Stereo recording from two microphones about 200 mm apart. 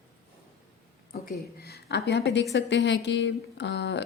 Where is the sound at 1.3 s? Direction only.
50° left (ahead or behind).